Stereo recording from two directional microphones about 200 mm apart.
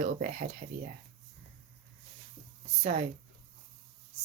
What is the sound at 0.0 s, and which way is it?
Speech, 45° right (ahead or behind).